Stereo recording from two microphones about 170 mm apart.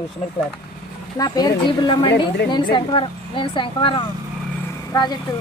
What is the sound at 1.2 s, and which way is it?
A woman's voice, 25° left (ahead or behind).